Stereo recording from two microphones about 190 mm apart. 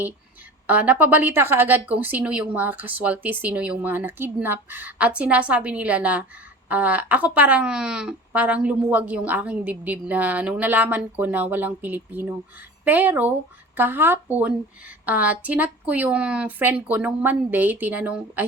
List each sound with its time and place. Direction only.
0.7 s speech: 10° right (ahead or behind)